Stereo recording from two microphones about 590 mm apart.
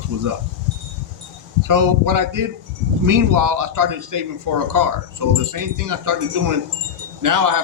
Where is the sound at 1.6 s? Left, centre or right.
Right.